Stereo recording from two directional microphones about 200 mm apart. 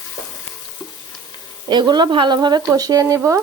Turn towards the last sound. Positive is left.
turn(degrees=-15)  # may be behind; listen again after turning